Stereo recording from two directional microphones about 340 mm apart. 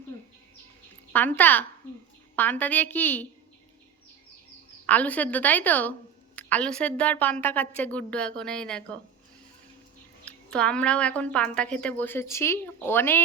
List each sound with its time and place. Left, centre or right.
1.1 s a woman's voice: centre
4.9 s a woman's voice: centre
10.2 s a woman's voice: centre